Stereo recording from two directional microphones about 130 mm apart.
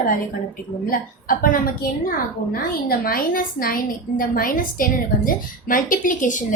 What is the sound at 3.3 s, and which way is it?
A woman's voice, 90° left.